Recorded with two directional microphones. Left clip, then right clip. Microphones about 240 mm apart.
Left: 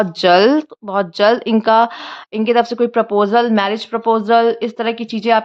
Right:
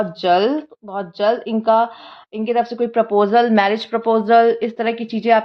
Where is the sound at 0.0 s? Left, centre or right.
Left.